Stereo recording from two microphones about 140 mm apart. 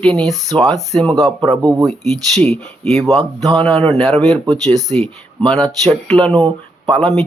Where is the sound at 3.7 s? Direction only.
45° right (ahead or behind).